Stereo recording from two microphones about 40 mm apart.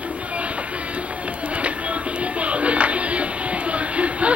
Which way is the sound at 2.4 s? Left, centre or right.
Right.